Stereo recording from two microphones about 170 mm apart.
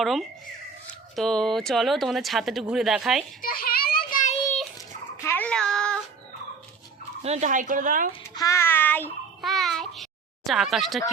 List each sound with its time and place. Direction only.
0.0 s speech: centre (ahead or behind)
3.4 s child singing: 60° left (ahead or behind)
5.2 s child singing: 10° left (ahead or behind)
7.2 s speech: 40° right (ahead or behind)
8.4 s child singing: 15° left (ahead or behind)
9.4 s a sound: centre (ahead or behind)